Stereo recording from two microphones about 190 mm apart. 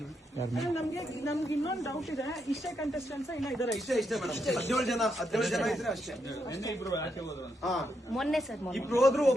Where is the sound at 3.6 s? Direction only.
Centre (ahead or behind).